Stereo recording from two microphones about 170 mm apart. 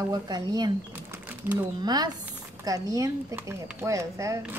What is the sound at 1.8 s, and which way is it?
Speech, 25° right (ahead or behind).